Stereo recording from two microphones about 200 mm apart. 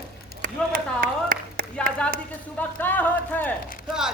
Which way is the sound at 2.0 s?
5° left (ahead or behind).